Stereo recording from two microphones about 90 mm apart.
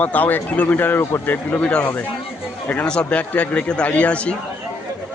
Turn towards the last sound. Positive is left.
turn(degrees=15)  # may be behind; listen again after turning